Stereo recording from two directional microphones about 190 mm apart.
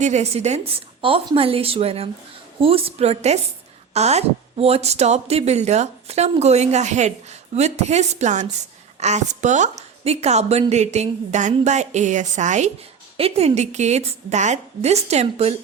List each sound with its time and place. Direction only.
0.0 s a woman's voice: 35° right (ahead or behind)